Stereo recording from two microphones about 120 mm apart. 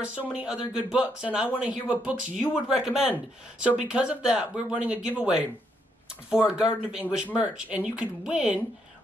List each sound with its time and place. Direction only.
0.0 s speech: 10° right (ahead or behind)